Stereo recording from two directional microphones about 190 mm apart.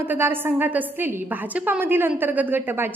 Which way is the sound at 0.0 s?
10° right (ahead or behind).